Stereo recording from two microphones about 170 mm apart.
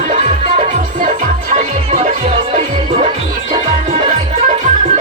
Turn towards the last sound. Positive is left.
turn(degrees=-50)  # may be behind; listen again after turning